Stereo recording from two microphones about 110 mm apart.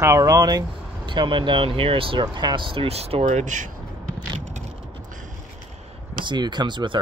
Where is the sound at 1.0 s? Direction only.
45° right (ahead or behind); by 3.4 s 75° right (ahead or behind).